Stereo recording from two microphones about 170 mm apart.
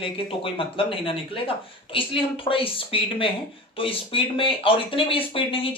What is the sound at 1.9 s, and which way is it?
Speech, 30° left (ahead or behind).